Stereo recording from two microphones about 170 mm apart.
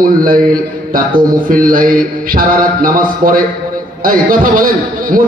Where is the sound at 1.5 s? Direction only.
55° right (ahead or behind).